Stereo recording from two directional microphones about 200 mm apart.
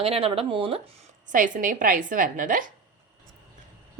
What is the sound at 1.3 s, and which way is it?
Speech, 45° right (ahead or behind).